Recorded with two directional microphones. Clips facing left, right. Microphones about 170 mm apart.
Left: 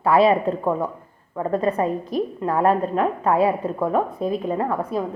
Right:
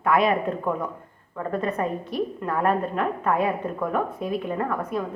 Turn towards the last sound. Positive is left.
turn(degrees=30)  # may be behind; listen again after turning